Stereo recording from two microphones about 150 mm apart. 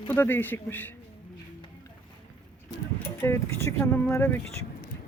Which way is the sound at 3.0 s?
15° left (ahead or behind).